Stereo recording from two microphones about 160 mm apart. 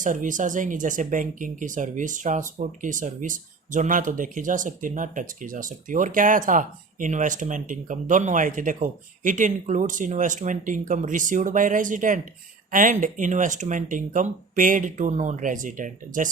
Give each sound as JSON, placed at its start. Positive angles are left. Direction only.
{"t": 0.0, "sound": "speech", "side_deg": -55}